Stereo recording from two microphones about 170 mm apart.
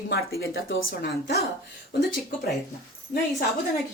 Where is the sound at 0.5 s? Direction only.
60° left (ahead or behind).